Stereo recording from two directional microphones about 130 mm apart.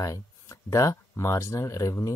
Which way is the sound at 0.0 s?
25° left (ahead or behind).